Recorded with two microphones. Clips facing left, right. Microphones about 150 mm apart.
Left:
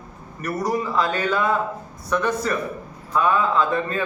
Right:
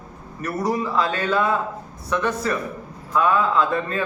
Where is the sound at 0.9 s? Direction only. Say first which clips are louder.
Even; centre (ahead or behind).